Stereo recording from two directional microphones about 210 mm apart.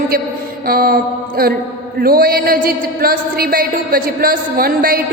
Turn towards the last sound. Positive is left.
turn(degrees=-45)  # may be behind; listen again after turning